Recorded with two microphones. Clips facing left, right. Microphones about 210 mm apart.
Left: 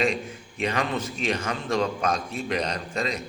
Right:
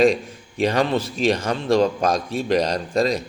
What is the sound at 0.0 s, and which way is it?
A man's voice, 35° right (ahead or behind).